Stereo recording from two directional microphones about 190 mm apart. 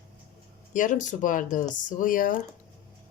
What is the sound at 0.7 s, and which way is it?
Speech, 45° left (ahead or behind).